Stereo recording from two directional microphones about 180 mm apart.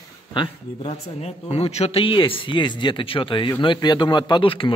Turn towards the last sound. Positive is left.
turn(degrees=30)  # may be behind; listen again after turning